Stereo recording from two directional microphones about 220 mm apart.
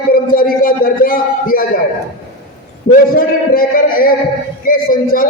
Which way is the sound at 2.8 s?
40° left (ahead or behind).